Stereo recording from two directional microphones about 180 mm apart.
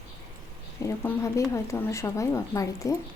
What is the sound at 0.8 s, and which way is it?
Speech, 15° left (ahead or behind).